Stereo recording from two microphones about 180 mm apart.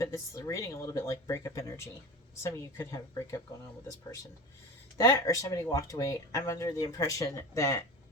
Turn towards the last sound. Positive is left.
turn(degrees=15)  # may be behind; listen again after turning